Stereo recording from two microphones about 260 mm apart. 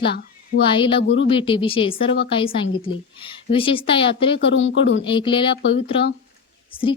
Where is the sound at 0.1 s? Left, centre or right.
Left.